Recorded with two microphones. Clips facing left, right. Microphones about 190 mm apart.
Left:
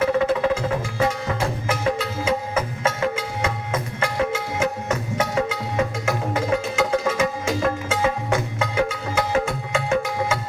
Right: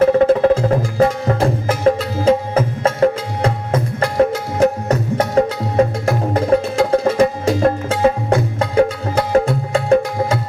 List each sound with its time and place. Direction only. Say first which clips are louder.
0.0 s music: right 8 dB; 45° right (ahead or behind)